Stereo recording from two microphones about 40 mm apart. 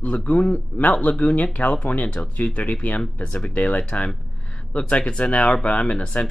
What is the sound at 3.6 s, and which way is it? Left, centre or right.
Speech, left.